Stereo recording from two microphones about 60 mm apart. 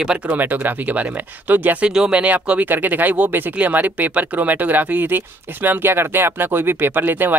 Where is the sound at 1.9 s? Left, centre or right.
Centre.